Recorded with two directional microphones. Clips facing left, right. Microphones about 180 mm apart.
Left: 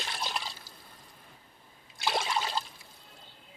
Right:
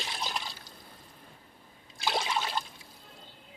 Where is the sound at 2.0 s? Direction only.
Centre (ahead or behind).